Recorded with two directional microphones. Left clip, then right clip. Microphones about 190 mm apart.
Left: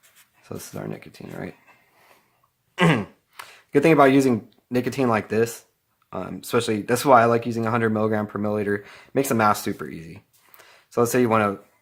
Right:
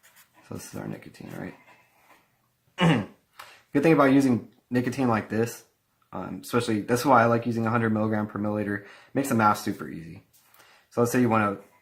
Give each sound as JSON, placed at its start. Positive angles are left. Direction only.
{"t": 0.4, "sound": "speech", "side_deg": 40}
{"t": 2.7, "sound": "throat clearing", "side_deg": 50}
{"t": 6.1, "sound": "speech", "side_deg": 40}